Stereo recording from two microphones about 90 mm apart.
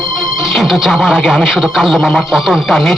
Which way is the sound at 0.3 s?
5° right (ahead or behind).